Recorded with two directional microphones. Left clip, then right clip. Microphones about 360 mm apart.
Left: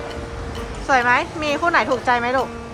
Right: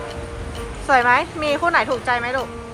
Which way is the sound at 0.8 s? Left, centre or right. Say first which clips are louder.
Right 1 dB; centre.